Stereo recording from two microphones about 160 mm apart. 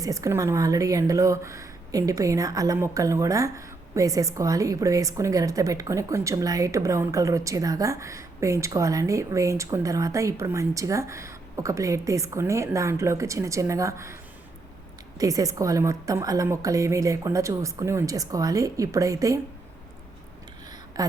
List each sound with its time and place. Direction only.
0.0 s a woman's voice: 20° right (ahead or behind)
15.2 s a woman's voice: 20° right (ahead or behind)
20.9 s a woman's voice: 20° right (ahead or behind)